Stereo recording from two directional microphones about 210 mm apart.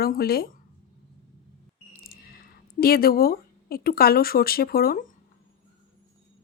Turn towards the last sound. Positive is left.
turn(degrees=45)  # may be behind; listen again after turning